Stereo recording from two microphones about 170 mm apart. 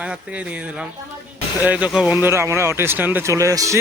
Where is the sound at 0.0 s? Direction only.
5° right (ahead or behind).